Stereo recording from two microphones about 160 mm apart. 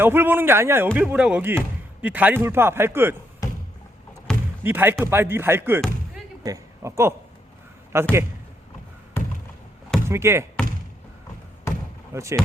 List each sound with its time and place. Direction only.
0.0 s speech: 15° right (ahead or behind)
4.3 s door: 5° left (ahead or behind)
4.6 s speech: 10° right (ahead or behind)
6.4 s a sound: 20° right (ahead or behind)
7.9 s speech: 15° right (ahead or behind)
9.2 s a sound: 15° left (ahead or behind)
10.1 s speech: 15° right (ahead or behind)
12.1 s speech: 20° right (ahead or behind)